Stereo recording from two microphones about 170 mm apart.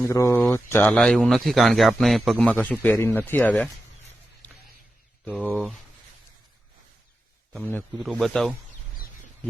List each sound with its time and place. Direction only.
0.0 s speech: 15° left (ahead or behind)
0.9 s a man's voice: 5° left (ahead or behind)
5.2 s speech: 5° left (ahead or behind)
5.5 s a man's voice: 5° right (ahead or behind)
7.5 s a man's voice: 10° left (ahead or behind)